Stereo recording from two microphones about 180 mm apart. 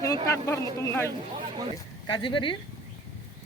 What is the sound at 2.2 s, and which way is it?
Speech, 25° left (ahead or behind).